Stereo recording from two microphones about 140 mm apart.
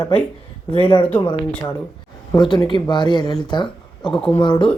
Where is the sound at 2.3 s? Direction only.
30° left (ahead or behind).